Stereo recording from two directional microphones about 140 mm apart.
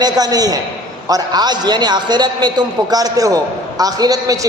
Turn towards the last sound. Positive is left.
turn(degrees=-25)  # may be behind; listen again after turning